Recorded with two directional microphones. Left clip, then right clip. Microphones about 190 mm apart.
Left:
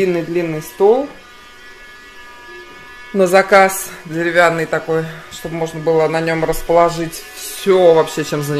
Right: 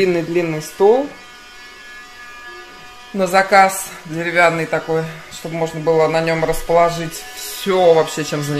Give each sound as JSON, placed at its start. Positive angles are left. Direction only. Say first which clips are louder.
{"t": 0.0, "sound": "speech", "louder": "even", "side_deg": 0}
{"t": 3.2, "sound": "speech", "louder": "left 2 dB", "side_deg": 35}